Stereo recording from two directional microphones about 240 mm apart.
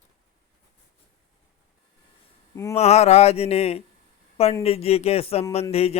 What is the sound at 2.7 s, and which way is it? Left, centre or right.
Speech, left.